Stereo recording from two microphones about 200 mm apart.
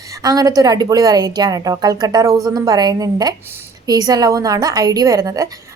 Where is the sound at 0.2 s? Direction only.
20° right (ahead or behind).